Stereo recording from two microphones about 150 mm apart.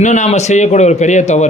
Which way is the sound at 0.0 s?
55° left (ahead or behind).